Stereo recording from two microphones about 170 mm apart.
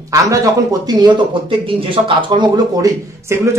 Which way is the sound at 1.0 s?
30° right (ahead or behind).